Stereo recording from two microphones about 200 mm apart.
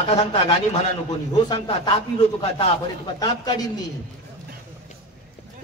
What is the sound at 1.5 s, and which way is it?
Speech, 25° left (ahead or behind).